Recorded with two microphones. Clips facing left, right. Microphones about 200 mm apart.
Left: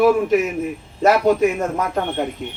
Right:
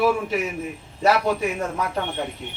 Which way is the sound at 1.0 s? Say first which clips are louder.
Left 5 dB; 45° left (ahead or behind).